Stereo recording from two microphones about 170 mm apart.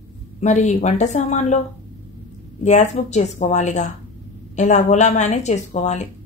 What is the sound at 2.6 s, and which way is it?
Speech, 40° left (ahead or behind).